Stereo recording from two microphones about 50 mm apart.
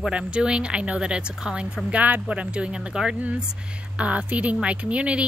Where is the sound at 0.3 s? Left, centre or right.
Centre.